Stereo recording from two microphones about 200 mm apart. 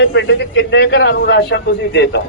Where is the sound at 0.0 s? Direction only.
65° left (ahead or behind).